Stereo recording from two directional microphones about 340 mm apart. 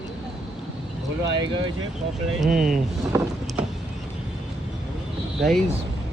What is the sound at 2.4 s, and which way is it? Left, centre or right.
Speech, centre.